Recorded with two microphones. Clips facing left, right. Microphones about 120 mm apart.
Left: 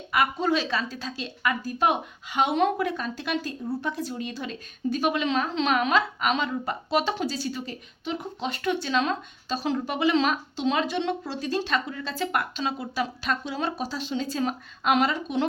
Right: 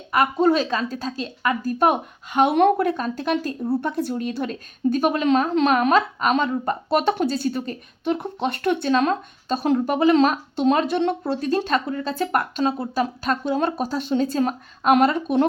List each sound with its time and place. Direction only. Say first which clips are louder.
0.1 s a woman's voice: right 6 dB; 45° right (ahead or behind)